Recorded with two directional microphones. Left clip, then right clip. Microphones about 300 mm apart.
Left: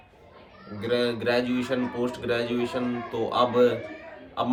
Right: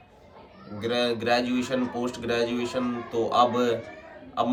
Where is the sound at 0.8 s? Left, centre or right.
Centre.